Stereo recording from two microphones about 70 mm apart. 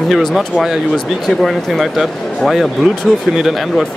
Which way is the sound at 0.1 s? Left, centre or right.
Centre.